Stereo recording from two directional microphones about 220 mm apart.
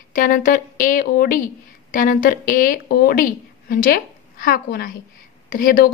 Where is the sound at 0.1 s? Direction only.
40° left (ahead or behind).